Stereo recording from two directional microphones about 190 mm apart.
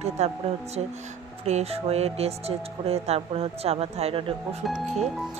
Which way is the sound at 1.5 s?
35° right (ahead or behind).